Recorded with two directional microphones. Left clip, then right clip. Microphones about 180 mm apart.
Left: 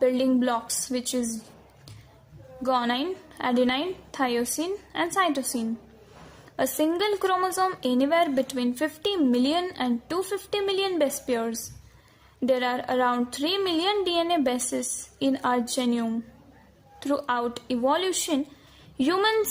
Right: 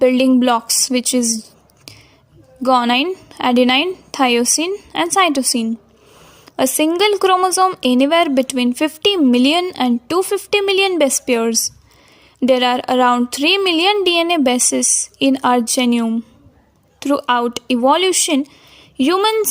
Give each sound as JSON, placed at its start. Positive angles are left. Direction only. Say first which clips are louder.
{"t": 0.0, "sound": "a woman's voice", "louder": "right 10 dB", "side_deg": -35}
{"t": 2.6, "sound": "a woman's voice", "louder": "right 11 dB", "side_deg": -35}
{"t": 6.7, "sound": "a woman's voice", "louder": "right 11 dB", "side_deg": -35}